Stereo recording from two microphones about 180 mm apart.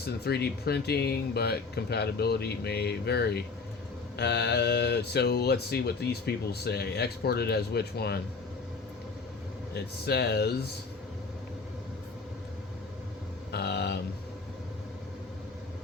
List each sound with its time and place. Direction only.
0.0 s speech: 65° left (ahead or behind)
9.7 s speech: 65° left (ahead or behind)
13.5 s speech: 65° left (ahead or behind)